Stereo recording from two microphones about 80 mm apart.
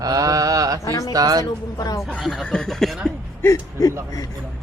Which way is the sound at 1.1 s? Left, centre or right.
Right.